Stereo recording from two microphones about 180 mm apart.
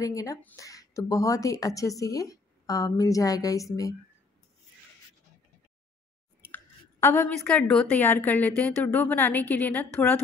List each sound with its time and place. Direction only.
0.0 s speech: 20° left (ahead or behind)
6.4 s speech: 10° left (ahead or behind)